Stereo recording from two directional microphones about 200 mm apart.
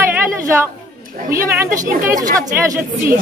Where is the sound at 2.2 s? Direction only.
15° right (ahead or behind).